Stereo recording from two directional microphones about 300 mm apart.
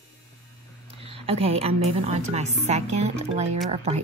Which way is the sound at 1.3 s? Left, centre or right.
Centre.